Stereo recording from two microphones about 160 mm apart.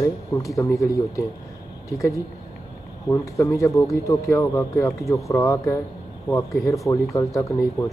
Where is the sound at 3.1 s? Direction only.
15° left (ahead or behind).